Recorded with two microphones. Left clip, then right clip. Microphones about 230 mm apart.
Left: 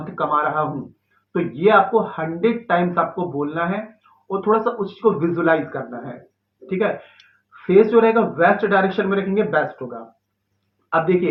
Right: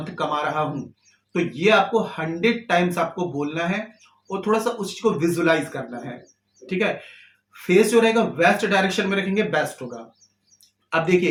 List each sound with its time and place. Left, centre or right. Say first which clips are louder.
0.0 s speech: left 4 dB; right